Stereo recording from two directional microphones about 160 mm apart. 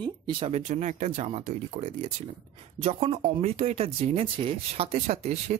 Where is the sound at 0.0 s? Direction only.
30° right (ahead or behind).